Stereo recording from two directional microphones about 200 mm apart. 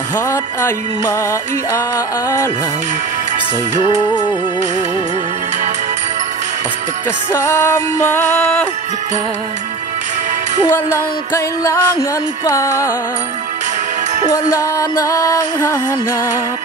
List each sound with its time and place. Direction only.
0.3 s music: 10° left (ahead or behind)
7.3 s music: 15° left (ahead or behind)
10.7 s music: 15° left (ahead or behind)
14.3 s music: 15° left (ahead or behind)